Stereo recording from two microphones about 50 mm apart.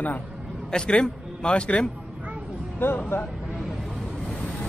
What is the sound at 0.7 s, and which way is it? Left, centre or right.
A man's voice, centre.